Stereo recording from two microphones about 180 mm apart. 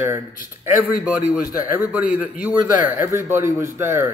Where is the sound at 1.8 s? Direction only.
10° right (ahead or behind).